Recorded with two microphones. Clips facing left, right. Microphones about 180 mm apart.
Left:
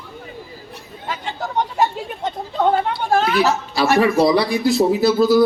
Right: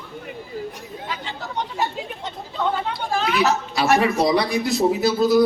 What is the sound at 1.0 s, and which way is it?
Chatter, 45° left (ahead or behind).